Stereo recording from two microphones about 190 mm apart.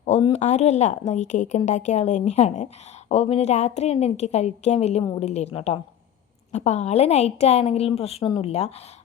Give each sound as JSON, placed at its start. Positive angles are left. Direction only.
{"t": 0.0, "sound": "a woman's voice", "side_deg": 35}